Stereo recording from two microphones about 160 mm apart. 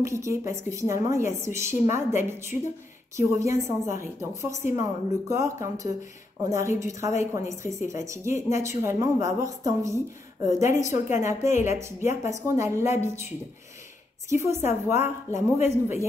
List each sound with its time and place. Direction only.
0.0 s a woman's voice: 20° right (ahead or behind)
14.4 s a woman's voice: 15° right (ahead or behind)